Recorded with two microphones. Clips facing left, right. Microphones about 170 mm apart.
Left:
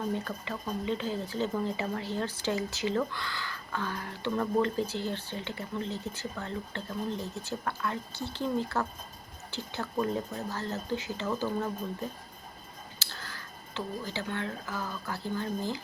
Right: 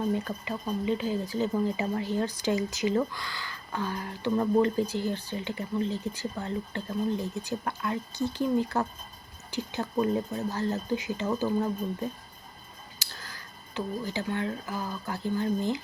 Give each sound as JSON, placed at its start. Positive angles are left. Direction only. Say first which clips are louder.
{"t": 0.3, "sound": "a woman's voice", "louder": "right 3 dB", "side_deg": -10}
{"t": 13.0, "sound": "tick", "louder": "even", "side_deg": -15}
{"t": 13.7, "sound": "a woman's voice", "louder": "right 4 dB", "side_deg": -15}